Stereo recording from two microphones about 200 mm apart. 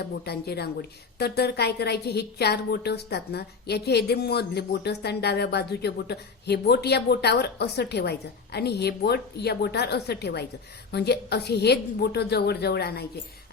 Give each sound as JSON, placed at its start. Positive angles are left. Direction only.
{"t": 0.0, "sound": "a woman's voice", "side_deg": 55}